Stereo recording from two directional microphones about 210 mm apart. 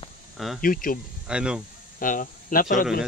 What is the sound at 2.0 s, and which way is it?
Speech, 40° left (ahead or behind).